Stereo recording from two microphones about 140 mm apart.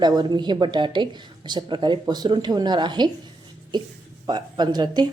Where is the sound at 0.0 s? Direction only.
30° right (ahead or behind).